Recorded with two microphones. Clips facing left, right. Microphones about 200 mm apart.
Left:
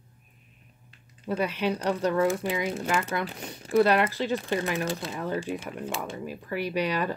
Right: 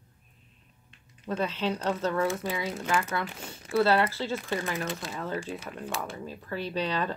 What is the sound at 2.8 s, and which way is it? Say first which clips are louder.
Speech: left 1 dB; 30° left (ahead or behind).